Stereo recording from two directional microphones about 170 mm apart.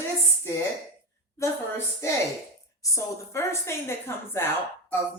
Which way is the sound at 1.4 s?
15° left (ahead or behind).